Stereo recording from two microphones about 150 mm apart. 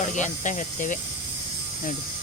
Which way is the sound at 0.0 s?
55° left (ahead or behind).